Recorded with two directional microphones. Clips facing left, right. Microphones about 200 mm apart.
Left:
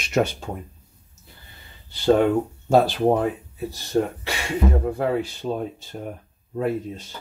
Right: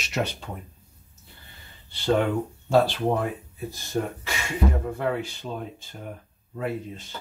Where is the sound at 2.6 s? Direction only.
45° left (ahead or behind).